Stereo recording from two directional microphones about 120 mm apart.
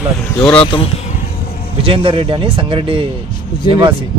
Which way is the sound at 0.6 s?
50° left (ahead or behind).